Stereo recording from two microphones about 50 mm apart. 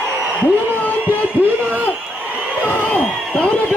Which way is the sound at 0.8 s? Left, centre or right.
Left.